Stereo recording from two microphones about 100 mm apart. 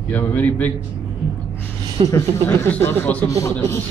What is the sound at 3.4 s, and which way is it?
Speech, 30° left (ahead or behind).